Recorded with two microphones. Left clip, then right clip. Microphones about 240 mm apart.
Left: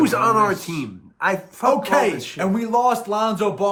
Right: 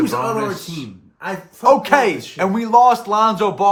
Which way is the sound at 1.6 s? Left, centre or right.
Centre.